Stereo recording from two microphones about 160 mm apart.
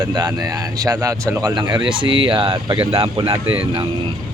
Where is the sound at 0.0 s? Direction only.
25° right (ahead or behind).